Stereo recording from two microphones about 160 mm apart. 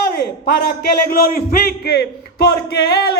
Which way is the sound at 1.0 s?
70° left (ahead or behind).